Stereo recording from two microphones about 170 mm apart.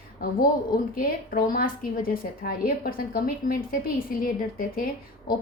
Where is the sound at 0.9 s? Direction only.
55° left (ahead or behind).